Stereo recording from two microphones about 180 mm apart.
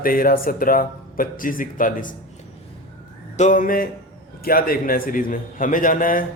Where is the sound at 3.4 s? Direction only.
45° left (ahead or behind).